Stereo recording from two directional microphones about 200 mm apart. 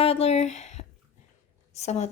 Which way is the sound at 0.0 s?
30° left (ahead or behind).